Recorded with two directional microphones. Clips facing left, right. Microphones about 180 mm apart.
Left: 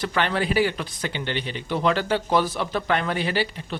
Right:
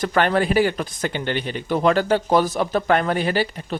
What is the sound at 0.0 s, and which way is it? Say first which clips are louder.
Speech: right 5 dB; 45° right (ahead or behind).